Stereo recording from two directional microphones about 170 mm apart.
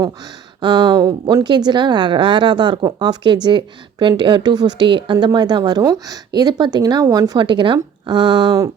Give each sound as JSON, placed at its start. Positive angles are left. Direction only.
{"t": 0.6, "sound": "a woman's voice", "side_deg": -25}